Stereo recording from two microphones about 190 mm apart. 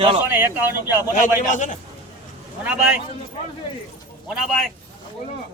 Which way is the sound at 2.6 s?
5° right (ahead or behind).